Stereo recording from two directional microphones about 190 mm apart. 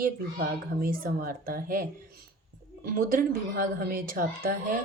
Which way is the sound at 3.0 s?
45° right (ahead or behind).